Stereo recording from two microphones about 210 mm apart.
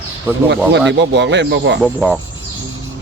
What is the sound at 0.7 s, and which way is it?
Speech, 55° right (ahead or behind).